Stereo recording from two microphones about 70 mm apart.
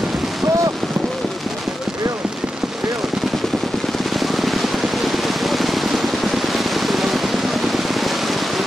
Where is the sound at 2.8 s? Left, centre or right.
Centre.